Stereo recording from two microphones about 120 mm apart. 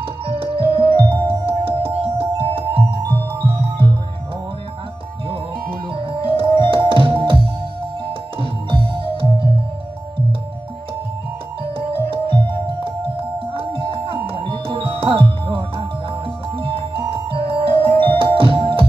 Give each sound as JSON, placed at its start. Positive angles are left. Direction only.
{"t": 0.3, "sound": "music", "side_deg": -50}
{"t": 5.9, "sound": "music", "side_deg": -45}
{"t": 11.9, "sound": "music", "side_deg": -45}
{"t": 13.5, "sound": "music", "side_deg": -45}